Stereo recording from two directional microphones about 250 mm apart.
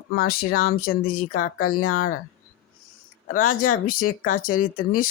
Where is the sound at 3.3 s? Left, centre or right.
Left.